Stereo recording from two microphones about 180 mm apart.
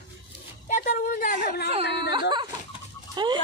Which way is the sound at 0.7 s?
45° left (ahead or behind).